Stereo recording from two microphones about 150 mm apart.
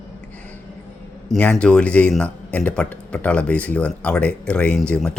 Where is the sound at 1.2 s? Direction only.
5° left (ahead or behind).